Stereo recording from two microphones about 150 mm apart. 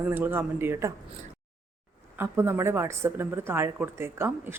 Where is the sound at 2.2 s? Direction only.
15° right (ahead or behind).